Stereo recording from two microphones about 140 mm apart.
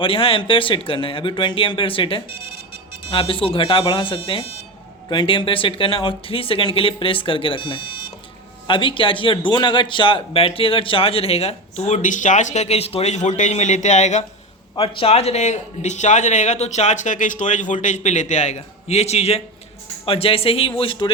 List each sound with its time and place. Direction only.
0.0 s speech: 40° left (ahead or behind)
12.0 s a man's voice: 65° left (ahead or behind)
14.8 s a man's voice: 40° left (ahead or behind)